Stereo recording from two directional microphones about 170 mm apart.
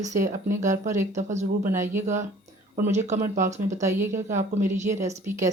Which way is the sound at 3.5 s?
45° right (ahead or behind).